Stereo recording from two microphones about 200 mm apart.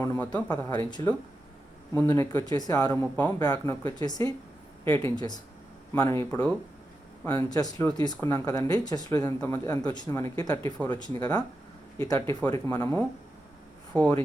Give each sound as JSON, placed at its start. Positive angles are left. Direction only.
{"t": 0.0, "sound": "speech", "side_deg": 15}
{"t": 0.7, "sound": "speech", "side_deg": 20}
{"t": 11.9, "sound": "speech", "side_deg": 15}